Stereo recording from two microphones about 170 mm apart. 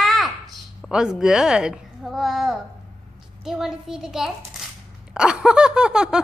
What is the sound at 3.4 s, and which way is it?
Snicker, centre (ahead or behind).